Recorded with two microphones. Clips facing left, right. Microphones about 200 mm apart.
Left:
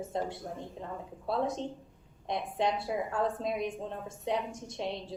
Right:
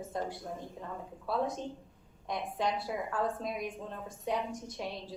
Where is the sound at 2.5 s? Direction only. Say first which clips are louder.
Left 3 dB; 25° left (ahead or behind).